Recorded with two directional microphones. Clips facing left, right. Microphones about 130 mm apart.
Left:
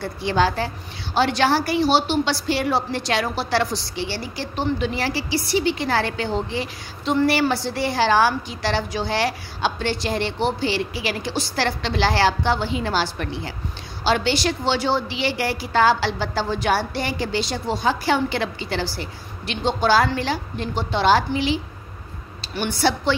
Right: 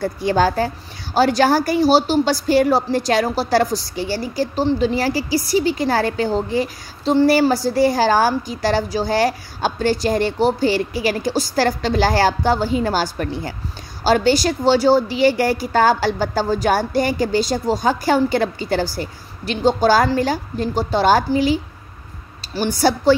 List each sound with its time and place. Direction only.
0.0 s a woman's voice: 40° right (ahead or behind)